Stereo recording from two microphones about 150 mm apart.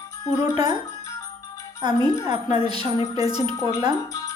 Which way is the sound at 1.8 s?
25° right (ahead or behind).